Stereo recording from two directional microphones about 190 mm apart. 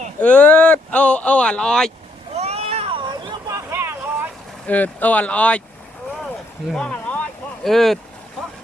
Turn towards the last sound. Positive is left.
turn(degrees=0)  # may be behind; listen again after turning